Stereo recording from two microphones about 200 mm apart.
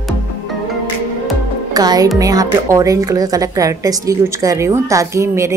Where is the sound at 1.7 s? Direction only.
20° right (ahead or behind).